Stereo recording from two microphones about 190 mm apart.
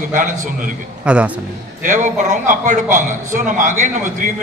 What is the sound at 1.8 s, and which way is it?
A man's voice, 45° right (ahead or behind).